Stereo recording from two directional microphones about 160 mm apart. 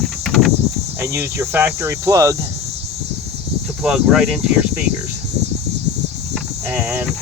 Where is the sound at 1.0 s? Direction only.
20° right (ahead or behind).